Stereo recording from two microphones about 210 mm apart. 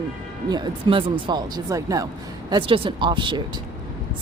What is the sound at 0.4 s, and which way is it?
A woman's voice, 20° right (ahead or behind).